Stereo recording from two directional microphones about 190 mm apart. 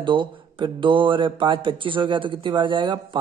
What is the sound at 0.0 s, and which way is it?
Speech, 25° right (ahead or behind).